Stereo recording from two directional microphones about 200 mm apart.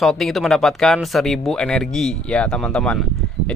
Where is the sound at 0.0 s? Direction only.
Centre (ahead or behind).